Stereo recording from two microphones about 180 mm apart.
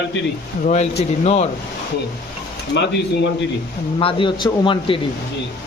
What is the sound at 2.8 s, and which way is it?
Speech, 75° left (ahead or behind).